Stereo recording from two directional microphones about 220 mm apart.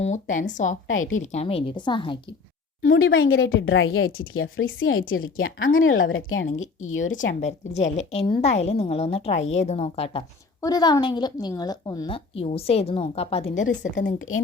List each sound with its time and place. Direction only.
0.0 s speech: 35° left (ahead or behind)
0.9 s a woman's voice: 65° left (ahead or behind)
1.2 s a woman's voice: 30° left (ahead or behind)
2.8 s speech: 65° left (ahead or behind)
7.9 s a woman's voice: 30° left (ahead or behind)
14.0 s speech: 65° left (ahead or behind)